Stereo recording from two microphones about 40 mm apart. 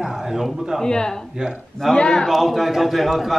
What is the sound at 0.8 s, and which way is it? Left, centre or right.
Speech, centre.